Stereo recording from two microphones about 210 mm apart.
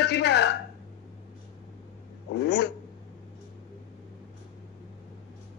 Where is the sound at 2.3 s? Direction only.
55° left (ahead or behind).